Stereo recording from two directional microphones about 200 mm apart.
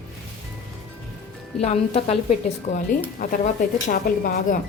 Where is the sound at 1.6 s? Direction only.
30° left (ahead or behind).